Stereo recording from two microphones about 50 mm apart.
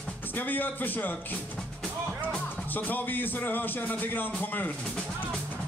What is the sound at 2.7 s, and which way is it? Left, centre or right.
Speech, left.